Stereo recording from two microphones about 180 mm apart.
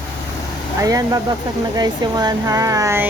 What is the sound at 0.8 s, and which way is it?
Speech, 20° right (ahead or behind).